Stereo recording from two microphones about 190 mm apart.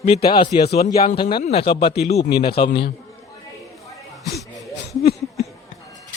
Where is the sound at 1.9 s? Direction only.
60° left (ahead or behind).